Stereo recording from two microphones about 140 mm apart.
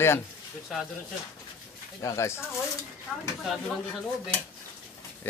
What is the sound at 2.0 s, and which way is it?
Speech, 20° left (ahead or behind).